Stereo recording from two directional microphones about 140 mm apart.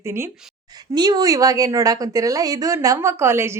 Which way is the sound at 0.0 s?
20° right (ahead or behind).